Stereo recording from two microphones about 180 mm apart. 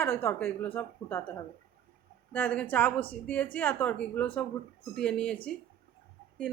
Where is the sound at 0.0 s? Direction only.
15° left (ahead or behind).